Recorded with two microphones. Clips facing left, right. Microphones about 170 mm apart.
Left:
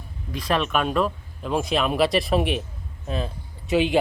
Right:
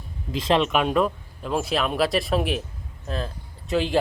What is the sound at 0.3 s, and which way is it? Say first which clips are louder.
Speech: right 3 dB; 25° right (ahead or behind).